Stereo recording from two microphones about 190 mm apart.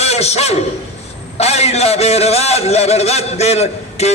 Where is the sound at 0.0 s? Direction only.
35° left (ahead or behind).